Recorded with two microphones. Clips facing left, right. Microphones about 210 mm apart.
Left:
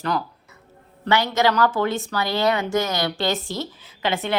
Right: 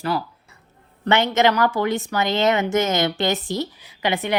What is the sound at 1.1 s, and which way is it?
A woman's voice, 20° right (ahead or behind).